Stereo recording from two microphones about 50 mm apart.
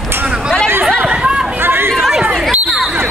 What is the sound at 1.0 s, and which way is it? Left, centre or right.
Chatter, right.